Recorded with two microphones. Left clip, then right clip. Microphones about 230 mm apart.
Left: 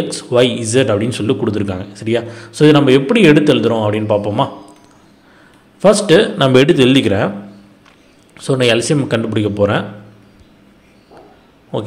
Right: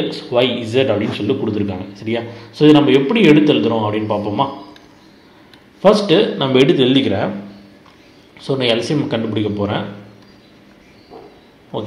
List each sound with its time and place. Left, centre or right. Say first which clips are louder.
0.1 s a man's voice: left 5 dB; left
5.8 s a man's voice: left 2 dB; left
8.4 s a man's voice: left 3 dB; left